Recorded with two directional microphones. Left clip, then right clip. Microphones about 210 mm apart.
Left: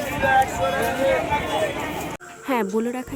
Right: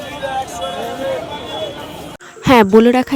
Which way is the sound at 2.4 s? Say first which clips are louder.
Right 14 dB; 50° right (ahead or behind).